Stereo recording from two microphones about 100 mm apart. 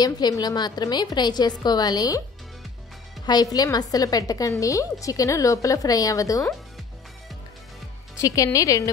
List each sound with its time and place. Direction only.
0.0 s a woman's voice: 40° left (ahead or behind)
3.3 s a woman's voice: 40° left (ahead or behind)
8.2 s a woman's voice: 35° left (ahead or behind)